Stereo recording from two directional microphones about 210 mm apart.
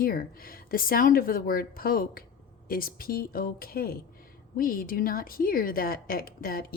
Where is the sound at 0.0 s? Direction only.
45° left (ahead or behind).